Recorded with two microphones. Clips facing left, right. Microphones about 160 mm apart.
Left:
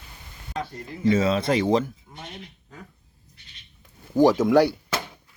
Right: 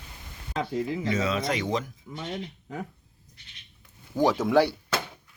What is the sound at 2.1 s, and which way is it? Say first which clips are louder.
Speech: right 6 dB; 90° right.